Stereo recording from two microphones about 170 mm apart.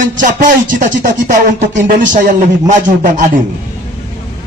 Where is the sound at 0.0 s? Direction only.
50° right (ahead or behind).